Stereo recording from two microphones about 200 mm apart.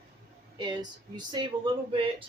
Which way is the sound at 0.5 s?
20° right (ahead or behind).